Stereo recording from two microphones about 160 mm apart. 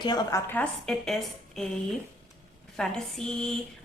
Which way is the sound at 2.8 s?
5° left (ahead or behind).